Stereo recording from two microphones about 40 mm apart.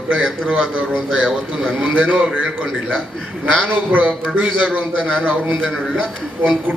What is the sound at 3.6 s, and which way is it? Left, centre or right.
A man's voice, right.